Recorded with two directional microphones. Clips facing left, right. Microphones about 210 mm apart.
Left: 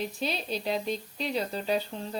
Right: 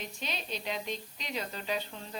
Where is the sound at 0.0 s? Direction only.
35° left (ahead or behind).